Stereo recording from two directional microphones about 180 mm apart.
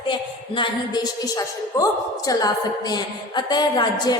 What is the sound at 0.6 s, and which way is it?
A woman's voice, 20° left (ahead or behind).